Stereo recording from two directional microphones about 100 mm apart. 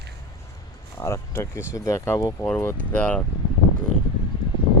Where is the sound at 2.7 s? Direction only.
15° left (ahead or behind).